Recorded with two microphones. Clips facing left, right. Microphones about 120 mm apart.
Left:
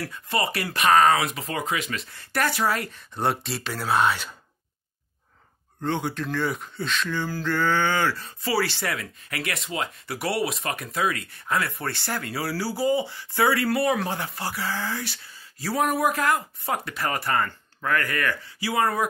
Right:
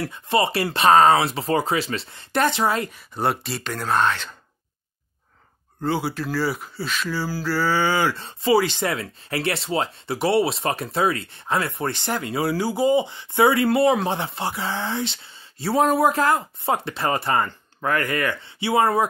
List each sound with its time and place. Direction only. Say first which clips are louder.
0.0 s speech: right 5 dB; 25° right (ahead or behind)
2.9 s speech: right 2 dB; centre (ahead or behind)
5.8 s speech: right 3 dB; 5° right (ahead or behind)
8.1 s speech: right 8 dB; 25° right (ahead or behind)